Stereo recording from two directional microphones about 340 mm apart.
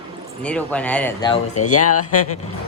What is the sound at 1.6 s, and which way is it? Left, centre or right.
Speech, left.